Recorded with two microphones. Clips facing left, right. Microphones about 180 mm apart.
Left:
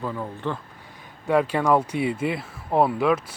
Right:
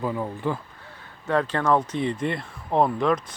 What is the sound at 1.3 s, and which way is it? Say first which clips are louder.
Speech: left 2 dB; 10° left (ahead or behind).